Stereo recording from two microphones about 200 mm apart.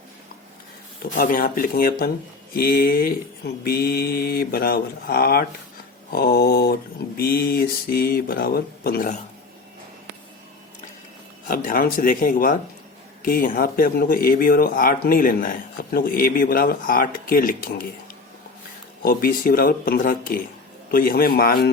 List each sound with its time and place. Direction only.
1.2 s speech: 45° left (ahead or behind)
11.4 s speech: 45° left (ahead or behind)
19.0 s speech: 45° left (ahead or behind)